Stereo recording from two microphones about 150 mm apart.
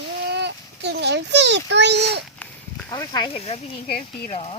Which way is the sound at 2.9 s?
30° left (ahead or behind).